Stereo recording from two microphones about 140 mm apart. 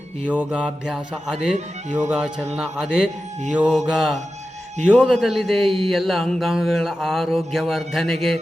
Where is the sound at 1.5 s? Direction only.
55° right (ahead or behind).